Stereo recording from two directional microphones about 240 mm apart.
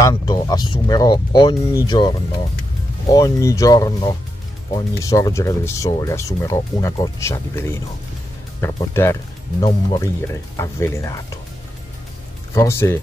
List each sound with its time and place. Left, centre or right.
0.0 s speech: centre
12.5 s speech: centre